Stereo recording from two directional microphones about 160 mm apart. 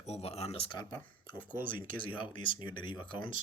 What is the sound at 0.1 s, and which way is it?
Speech, 40° left (ahead or behind).